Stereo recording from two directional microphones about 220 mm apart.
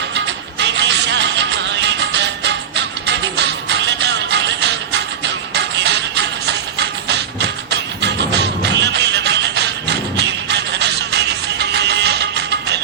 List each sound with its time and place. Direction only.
0.6 s music: 55° right (ahead or behind)